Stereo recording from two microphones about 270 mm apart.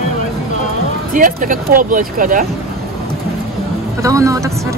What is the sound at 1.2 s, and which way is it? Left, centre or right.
Speech, right.